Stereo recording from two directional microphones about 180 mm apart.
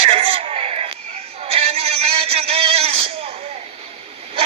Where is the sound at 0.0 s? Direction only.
35° right (ahead or behind).